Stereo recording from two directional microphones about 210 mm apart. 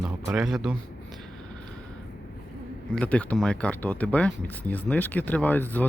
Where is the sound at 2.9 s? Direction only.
5° left (ahead or behind).